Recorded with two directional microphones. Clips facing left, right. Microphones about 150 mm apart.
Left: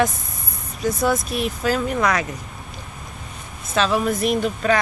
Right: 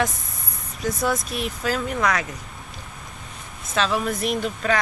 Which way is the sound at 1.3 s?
50° left (ahead or behind).